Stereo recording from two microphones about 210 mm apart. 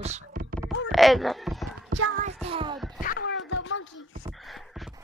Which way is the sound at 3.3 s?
65° left (ahead or behind).